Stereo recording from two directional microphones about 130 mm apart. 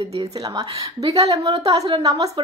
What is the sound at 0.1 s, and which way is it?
A woman's voice, 30° right (ahead or behind).